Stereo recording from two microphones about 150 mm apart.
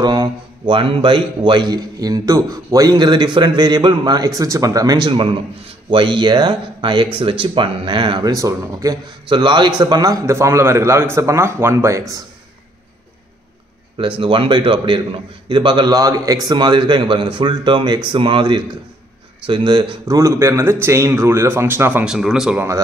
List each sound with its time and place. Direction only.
0.0 s a man's voice: 30° right (ahead or behind)
13.9 s a man's voice: 35° right (ahead or behind)
20.2 s a man's voice: 20° right (ahead or behind)
22.0 s speech: 5° right (ahead or behind)